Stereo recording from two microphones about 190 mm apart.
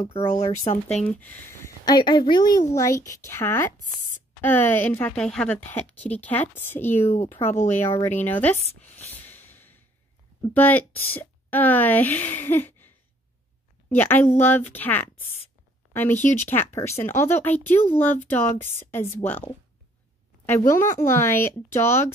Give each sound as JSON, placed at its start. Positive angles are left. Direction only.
{"t": 0.0, "sound": "speech", "side_deg": 35}
{"t": 1.2, "sound": "a woman's voice", "side_deg": 10}
{"t": 9.1, "sound": "snort", "side_deg": 10}
{"t": 10.5, "sound": "a woman's voice", "side_deg": 10}
{"t": 13.8, "sound": "a woman's voice", "side_deg": 10}